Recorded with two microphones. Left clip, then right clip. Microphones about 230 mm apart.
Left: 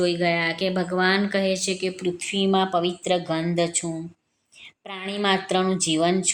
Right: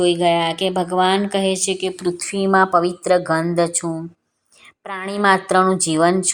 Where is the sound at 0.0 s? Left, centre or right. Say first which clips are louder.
Right 6 dB; right.